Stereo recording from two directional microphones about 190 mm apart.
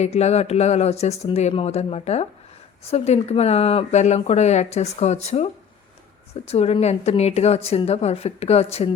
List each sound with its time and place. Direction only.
0.0 s speech: 35° left (ahead or behind)
6.5 s speech: 35° left (ahead or behind)